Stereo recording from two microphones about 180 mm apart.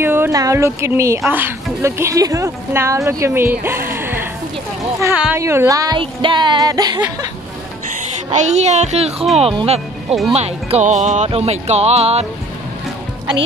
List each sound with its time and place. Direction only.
0.0 s a woman's voice: 10° right (ahead or behind)
8.3 s speech: 40° right (ahead or behind)